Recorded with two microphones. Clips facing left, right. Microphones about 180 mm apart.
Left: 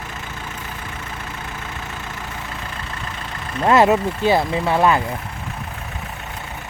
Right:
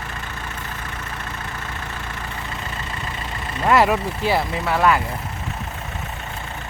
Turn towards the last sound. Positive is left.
turn(degrees=20)  # may be behind; listen again after turning